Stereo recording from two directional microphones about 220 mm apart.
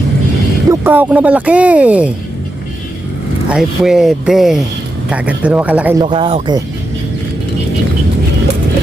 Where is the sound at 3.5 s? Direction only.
5° right (ahead or behind).